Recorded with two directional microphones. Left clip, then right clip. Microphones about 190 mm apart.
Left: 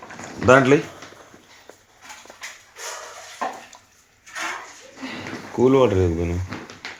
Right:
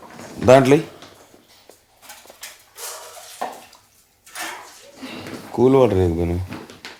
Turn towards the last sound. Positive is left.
turn(degrees=-25)  # may be behind; listen again after turning